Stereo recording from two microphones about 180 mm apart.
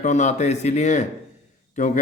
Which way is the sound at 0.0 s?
40° left (ahead or behind).